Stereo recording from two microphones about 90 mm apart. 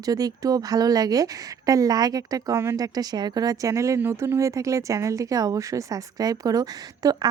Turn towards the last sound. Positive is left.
turn(degrees=-45)  # may be behind; listen again after turning